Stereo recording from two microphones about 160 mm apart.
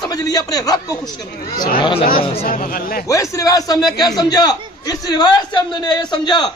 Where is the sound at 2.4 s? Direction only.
60° left (ahead or behind).